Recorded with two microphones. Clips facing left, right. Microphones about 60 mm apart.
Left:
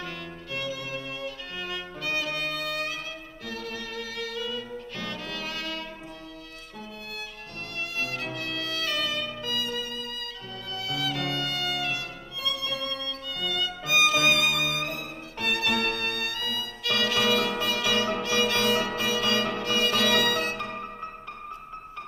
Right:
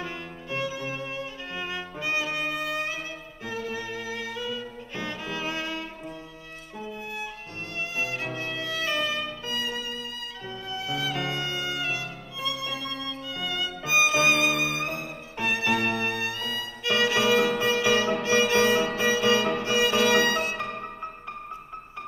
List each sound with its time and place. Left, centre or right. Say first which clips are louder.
0.0 s music: right 1 dB; right
3.4 s violin: right 4 dB; centre
8.0 s music: right 1 dB; centre